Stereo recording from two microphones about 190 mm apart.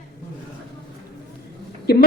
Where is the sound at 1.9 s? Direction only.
55° left (ahead or behind).